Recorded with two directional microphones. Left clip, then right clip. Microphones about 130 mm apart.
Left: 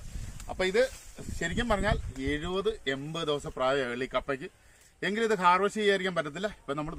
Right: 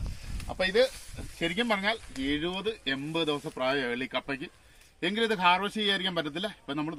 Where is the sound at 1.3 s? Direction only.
30° left (ahead or behind).